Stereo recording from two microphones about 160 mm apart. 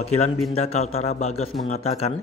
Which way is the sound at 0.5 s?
40° left (ahead or behind).